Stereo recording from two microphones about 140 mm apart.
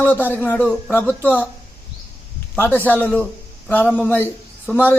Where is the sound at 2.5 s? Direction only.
15° left (ahead or behind).